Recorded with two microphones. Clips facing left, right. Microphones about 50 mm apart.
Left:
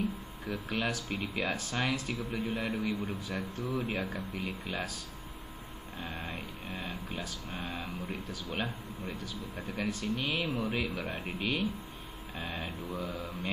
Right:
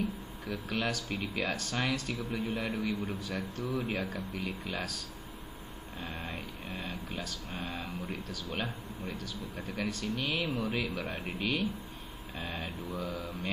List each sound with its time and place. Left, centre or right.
0.4 s speech: centre
2.6 s a man's voice: centre
6.0 s speech: centre
8.1 s speech: left
8.5 s a man's voice: centre